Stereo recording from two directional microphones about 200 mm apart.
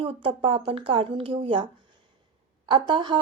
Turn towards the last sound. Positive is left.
turn(degrees=-25)  # may be behind; listen again after turning